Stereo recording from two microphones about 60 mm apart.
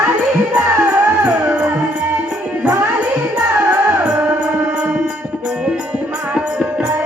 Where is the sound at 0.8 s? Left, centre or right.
Right.